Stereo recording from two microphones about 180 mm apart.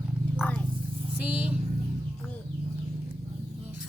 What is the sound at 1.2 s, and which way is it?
Speech, 10° right (ahead or behind).